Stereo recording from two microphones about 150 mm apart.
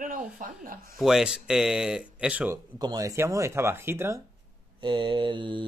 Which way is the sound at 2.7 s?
25° right (ahead or behind).